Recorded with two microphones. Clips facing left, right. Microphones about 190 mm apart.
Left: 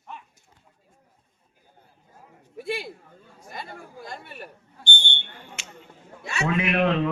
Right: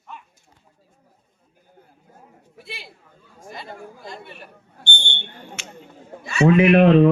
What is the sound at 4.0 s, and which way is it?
Chatter, 50° left (ahead or behind).